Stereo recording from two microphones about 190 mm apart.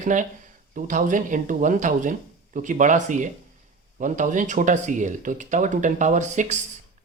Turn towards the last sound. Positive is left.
turn(degrees=-40)  # may be behind; listen again after turning